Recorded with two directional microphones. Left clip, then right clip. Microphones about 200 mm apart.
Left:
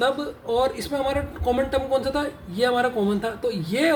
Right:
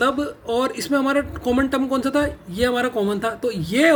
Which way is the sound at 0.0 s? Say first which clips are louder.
Right 3 dB; 55° right (ahead or behind).